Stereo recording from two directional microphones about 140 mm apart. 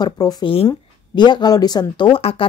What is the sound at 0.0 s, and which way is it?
Speech, 30° left (ahead or behind).